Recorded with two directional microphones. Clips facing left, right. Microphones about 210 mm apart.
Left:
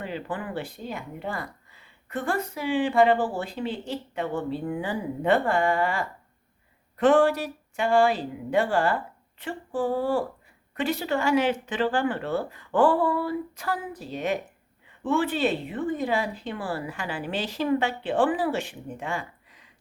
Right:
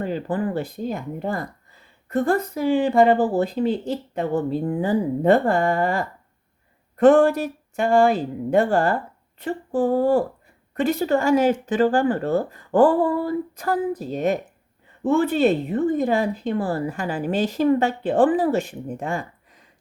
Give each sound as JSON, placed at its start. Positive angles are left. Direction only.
{"t": 0.0, "sound": "a woman's voice", "side_deg": -40}